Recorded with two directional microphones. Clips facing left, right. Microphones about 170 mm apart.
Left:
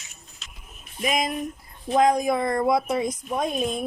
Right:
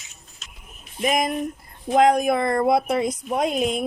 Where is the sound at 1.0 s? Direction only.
50° right (ahead or behind).